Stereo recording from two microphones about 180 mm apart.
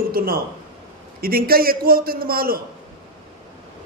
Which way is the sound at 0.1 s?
55° right (ahead or behind).